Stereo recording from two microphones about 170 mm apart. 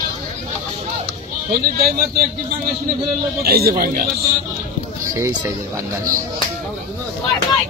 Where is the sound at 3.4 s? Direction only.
65° right (ahead or behind).